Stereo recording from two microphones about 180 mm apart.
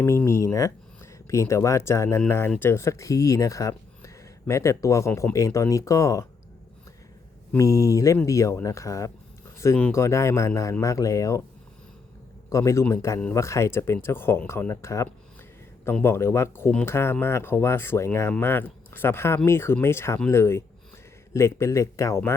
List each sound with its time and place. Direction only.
0.0 s speech: 15° left (ahead or behind)
7.5 s speech: 15° left (ahead or behind)
12.5 s speech: 15° left (ahead or behind)